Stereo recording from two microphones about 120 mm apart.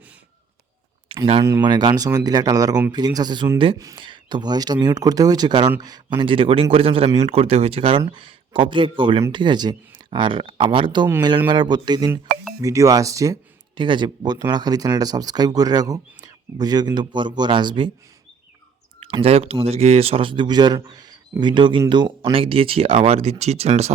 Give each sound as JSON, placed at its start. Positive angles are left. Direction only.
{"t": 1.0, "sound": "speech", "side_deg": -45}
{"t": 13.7, "sound": "speech", "side_deg": -40}
{"t": 18.9, "sound": "speech", "side_deg": -55}